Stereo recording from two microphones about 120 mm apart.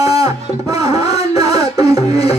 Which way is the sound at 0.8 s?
60° left (ahead or behind).